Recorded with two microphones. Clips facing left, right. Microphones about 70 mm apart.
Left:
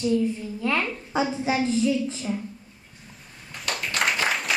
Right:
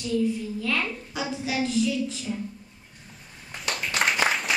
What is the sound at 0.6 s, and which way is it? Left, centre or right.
A man's voice, left.